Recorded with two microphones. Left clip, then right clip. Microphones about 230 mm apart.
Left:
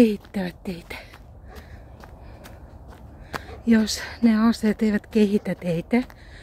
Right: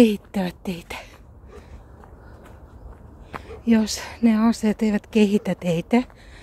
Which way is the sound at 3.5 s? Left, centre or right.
Centre.